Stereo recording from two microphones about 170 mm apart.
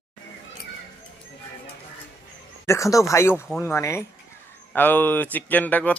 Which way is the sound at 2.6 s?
15° left (ahead or behind).